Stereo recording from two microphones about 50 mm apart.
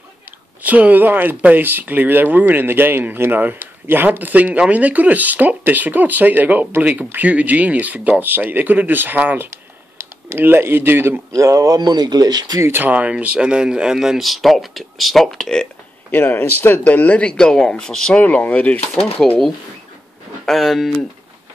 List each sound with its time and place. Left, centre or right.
0.6 s speech: right
11.3 s speech: right
12.7 s speech: right; by 15.7 s centre
16.1 s speech: left
17.2 s speech: centre
18.1 s speech: left
20.4 s speech: centre